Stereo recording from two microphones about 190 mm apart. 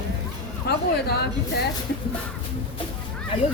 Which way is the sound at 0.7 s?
60° left (ahead or behind).